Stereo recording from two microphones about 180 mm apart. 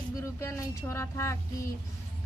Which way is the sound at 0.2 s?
15° left (ahead or behind).